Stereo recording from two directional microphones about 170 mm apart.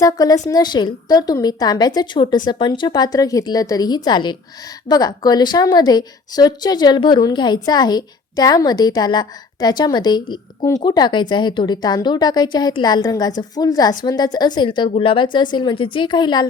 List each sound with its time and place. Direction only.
0.0 s a woman's voice: 20° left (ahead or behind)